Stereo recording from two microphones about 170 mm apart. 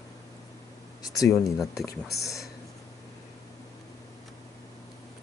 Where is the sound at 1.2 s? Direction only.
20° left (ahead or behind).